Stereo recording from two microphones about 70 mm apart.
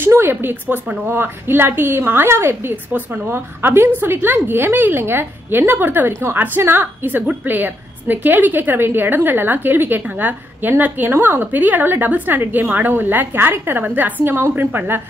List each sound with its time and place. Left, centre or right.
0.2 s a woman's voice: right
2.7 s a woman's voice: right